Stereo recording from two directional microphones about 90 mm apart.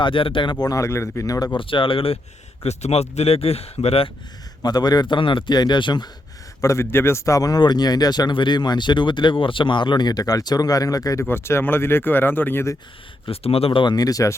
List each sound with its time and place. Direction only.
0.0 s speech: 75° left (ahead or behind)
0.6 s speech: 40° left (ahead or behind)
1.5 s speech: 70° left (ahead or behind)
3.2 s speech: 90° left
4.6 s speech: 50° left (ahead or behind)
6.6 s speech: 35° left (ahead or behind)
11.3 s speech: 30° left (ahead or behind)
13.2 s speech: 90° left
13.9 s speech: 40° left (ahead or behind)